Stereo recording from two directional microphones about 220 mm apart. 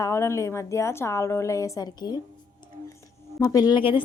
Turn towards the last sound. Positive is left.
turn(degrees=20)  # may be behind; listen again after turning